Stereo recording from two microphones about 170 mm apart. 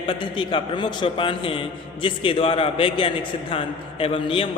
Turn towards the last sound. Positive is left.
turn(degrees=30)  # may be behind; listen again after turning